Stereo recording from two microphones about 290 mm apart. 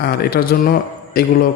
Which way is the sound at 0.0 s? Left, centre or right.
Left.